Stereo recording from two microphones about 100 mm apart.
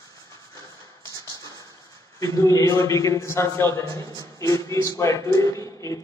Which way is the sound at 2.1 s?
35° left (ahead or behind).